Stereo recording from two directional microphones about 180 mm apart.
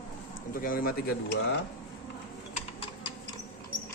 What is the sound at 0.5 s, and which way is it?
Speech, 55° left (ahead or behind).